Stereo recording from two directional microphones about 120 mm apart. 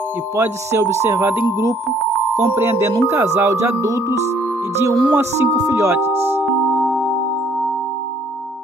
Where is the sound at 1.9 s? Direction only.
Centre (ahead or behind).